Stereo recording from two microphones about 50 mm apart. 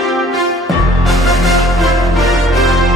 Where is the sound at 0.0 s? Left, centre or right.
Centre.